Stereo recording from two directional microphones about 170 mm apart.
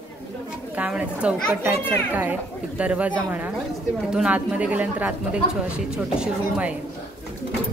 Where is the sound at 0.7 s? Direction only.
5° right (ahead or behind).